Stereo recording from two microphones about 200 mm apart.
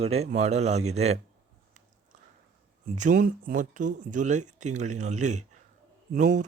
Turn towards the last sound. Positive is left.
turn(degrees=-40)  # may be behind; listen again after turning